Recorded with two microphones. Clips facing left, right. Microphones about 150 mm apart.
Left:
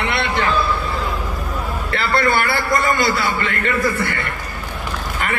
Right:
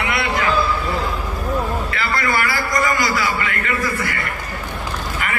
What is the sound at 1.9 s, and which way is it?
A man's voice, 30° left (ahead or behind).